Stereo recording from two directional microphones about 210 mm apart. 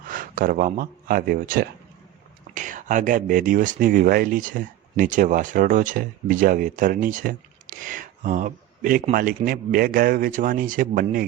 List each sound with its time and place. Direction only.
0.1 s speech: 40° right (ahead or behind)